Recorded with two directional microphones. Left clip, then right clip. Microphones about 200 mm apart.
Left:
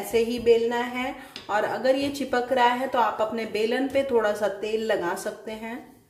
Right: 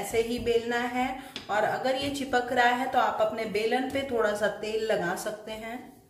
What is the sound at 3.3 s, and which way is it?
A woman's voice, 40° left (ahead or behind).